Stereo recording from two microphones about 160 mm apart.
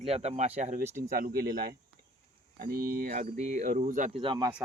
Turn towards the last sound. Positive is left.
turn(degrees=-30)  # may be behind; listen again after turning